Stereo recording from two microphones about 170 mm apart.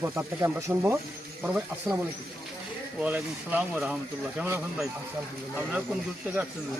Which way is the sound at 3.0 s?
5° right (ahead or behind).